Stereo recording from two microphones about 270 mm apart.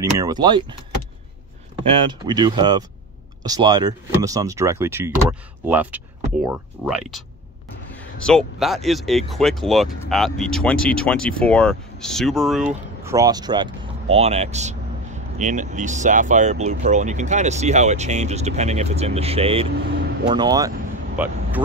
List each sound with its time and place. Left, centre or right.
0.0 s speech: centre
1.8 s speech: centre